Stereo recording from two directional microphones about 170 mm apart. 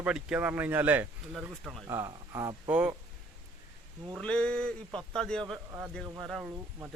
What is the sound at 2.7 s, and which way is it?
Speech, 5° right (ahead or behind).